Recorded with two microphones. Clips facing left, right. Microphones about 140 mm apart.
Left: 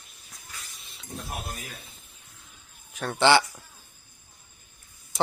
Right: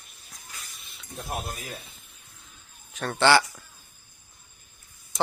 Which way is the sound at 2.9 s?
10° left (ahead or behind).